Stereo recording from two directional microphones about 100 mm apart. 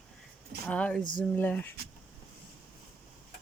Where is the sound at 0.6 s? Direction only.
10° left (ahead or behind).